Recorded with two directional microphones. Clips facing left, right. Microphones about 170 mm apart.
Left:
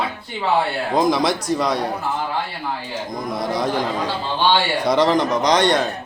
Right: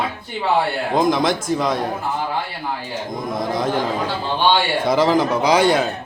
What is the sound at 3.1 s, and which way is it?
A man's voice, centre (ahead or behind).